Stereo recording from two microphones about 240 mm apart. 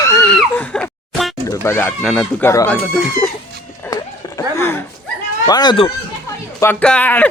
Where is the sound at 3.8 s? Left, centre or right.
Centre.